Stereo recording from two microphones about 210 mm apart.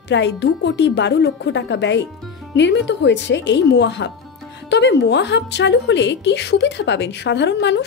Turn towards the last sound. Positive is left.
turn(degrees=55)  # may be behind; listen again after turning